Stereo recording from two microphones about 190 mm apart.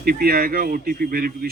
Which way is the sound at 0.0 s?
55° right (ahead or behind).